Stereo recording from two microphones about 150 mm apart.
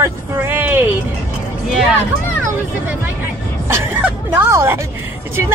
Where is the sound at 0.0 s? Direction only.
15° right (ahead or behind).